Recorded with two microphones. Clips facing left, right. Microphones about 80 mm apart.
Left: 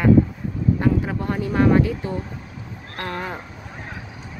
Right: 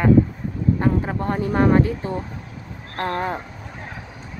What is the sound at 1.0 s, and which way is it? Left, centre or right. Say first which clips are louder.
Speech: right 1 dB; right.